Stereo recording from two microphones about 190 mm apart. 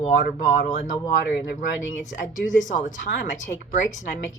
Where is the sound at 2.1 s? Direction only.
40° left (ahead or behind).